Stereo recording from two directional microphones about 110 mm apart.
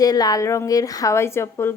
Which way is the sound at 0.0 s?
35° left (ahead or behind).